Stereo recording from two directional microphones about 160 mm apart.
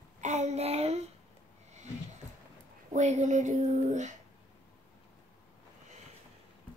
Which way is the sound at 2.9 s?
45° right (ahead or behind).